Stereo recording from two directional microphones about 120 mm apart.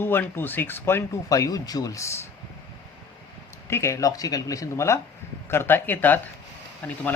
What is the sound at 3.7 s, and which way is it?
Speech, 25° left (ahead or behind).